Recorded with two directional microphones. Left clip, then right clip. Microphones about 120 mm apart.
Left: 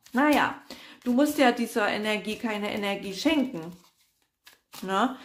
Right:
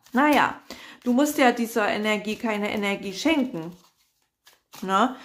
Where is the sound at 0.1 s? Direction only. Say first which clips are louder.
Right 3 dB; 35° right (ahead or behind).